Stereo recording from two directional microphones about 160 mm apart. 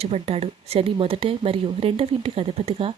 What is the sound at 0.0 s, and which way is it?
Speech, 40° right (ahead or behind).